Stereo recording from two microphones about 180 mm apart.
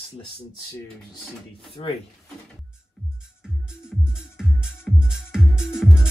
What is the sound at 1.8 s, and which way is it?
Speech, 30° left (ahead or behind).